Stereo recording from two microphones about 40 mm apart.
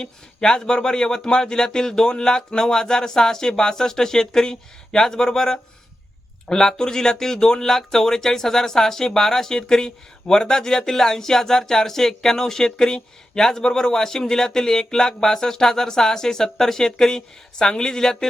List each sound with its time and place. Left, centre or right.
0.0 s speech: centre